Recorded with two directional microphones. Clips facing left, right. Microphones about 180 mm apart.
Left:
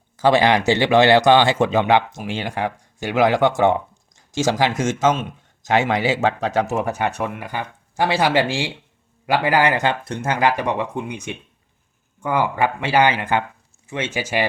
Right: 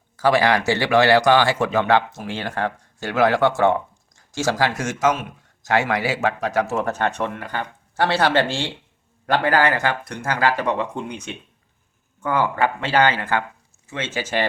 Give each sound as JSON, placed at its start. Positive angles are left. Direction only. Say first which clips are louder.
{"t": 0.2, "sound": "a man's voice", "louder": "left 2 dB", "side_deg": 20}